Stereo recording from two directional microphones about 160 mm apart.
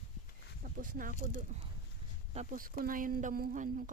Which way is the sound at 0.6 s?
60° right (ahead or behind).